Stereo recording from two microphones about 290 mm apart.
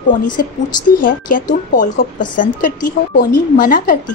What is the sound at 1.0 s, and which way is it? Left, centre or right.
A woman's voice, left.